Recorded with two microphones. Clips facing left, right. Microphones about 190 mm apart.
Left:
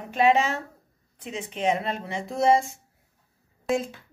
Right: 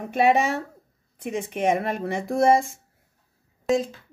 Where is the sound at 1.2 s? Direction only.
55° right (ahead or behind).